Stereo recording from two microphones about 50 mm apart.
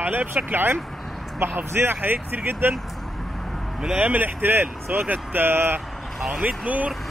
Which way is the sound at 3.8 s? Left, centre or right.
Right.